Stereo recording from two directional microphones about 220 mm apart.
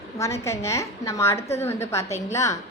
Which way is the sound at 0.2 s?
15° left (ahead or behind).